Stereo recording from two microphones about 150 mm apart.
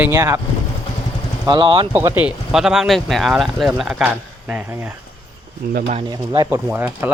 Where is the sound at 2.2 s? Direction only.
5° right (ahead or behind).